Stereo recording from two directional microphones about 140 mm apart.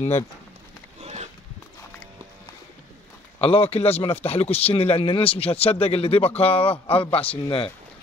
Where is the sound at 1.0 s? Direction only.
50° right (ahead or behind).